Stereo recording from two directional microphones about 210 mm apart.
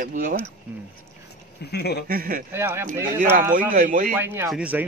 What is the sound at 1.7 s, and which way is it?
Speech, 50° left (ahead or behind).